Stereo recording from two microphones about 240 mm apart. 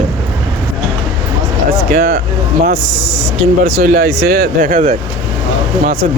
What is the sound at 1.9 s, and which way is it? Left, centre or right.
Speech, right.